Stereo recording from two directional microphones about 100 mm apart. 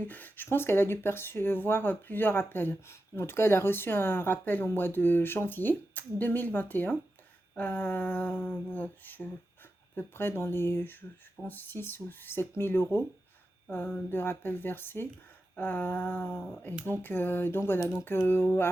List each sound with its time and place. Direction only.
0.1 s speech: 20° left (ahead or behind)
7.5 s a sound: 20° left (ahead or behind)
9.9 s speech: 20° left (ahead or behind)